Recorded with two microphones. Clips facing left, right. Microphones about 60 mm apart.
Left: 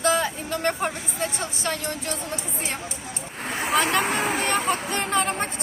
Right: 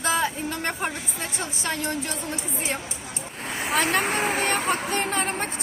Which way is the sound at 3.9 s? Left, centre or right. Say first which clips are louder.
Left 1 dB; right.